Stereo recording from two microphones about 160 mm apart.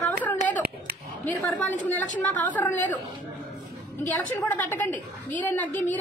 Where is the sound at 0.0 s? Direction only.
10° left (ahead or behind).